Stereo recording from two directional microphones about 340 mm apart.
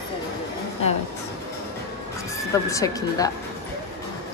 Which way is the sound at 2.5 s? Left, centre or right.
Centre.